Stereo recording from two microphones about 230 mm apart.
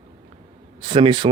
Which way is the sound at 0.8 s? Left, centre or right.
Right.